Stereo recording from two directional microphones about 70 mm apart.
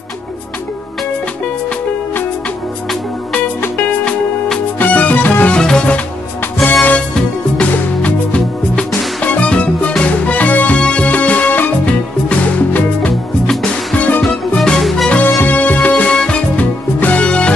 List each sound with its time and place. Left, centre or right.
3.6 s music: left
5.5 s music: centre
13.1 s music: centre
13.9 s music: left
14.6 s music: centre
15.4 s music: left